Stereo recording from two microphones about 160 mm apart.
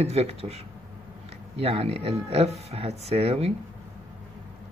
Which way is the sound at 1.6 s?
40° right (ahead or behind).